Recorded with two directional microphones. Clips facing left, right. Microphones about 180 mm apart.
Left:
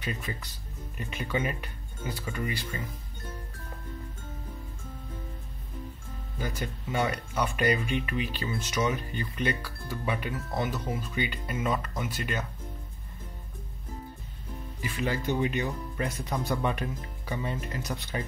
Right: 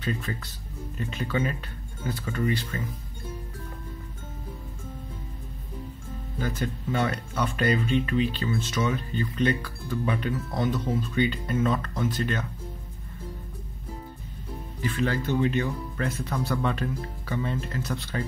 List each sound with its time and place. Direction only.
0.0 s speech: 15° left (ahead or behind)
6.3 s speech: 10° left (ahead or behind)
14.8 s speech: 10° left (ahead or behind)